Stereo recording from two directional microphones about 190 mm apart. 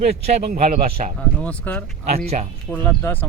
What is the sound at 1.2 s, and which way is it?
Speech, 5° left (ahead or behind).